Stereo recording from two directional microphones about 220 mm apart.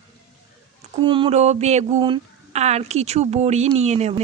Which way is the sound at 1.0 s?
20° right (ahead or behind).